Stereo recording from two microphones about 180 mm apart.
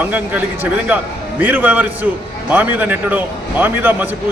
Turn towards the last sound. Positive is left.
turn(degrees=-10)  # may be behind; listen again after turning